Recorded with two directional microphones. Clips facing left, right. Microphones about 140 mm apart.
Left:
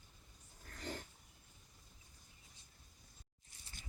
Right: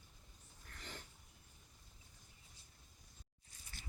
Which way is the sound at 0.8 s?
40° left (ahead or behind).